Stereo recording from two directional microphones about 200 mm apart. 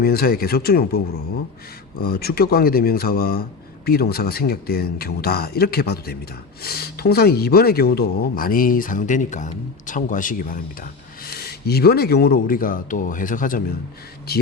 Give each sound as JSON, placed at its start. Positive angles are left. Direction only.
{"t": 0.0, "sound": "speech", "side_deg": 50}